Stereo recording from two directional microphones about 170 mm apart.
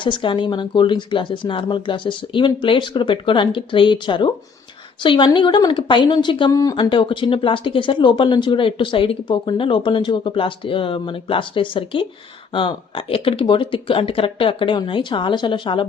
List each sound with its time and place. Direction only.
0.0 s speech: 30° left (ahead or behind)